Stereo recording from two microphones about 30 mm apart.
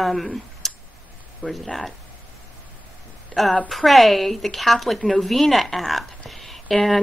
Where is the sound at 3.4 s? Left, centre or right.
Centre.